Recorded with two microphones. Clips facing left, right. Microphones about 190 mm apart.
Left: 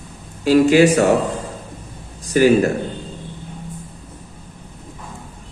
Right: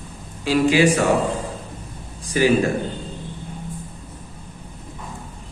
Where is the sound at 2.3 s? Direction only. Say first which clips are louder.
Left 4 dB; 45° left (ahead or behind).